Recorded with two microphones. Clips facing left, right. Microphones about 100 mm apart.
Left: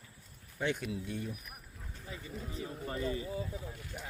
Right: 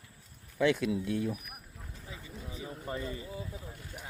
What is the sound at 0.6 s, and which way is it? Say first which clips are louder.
Speech: right 7 dB; 90° right.